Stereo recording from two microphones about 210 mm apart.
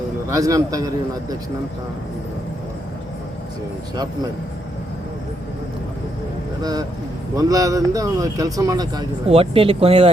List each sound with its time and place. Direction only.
0.3 s speech: 15° right (ahead or behind)
6.6 s speech: 20° right (ahead or behind)